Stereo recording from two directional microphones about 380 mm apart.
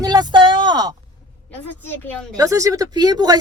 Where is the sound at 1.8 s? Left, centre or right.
Centre.